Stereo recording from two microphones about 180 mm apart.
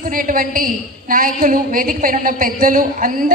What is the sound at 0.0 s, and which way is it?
A woman's voice, 50° right (ahead or behind).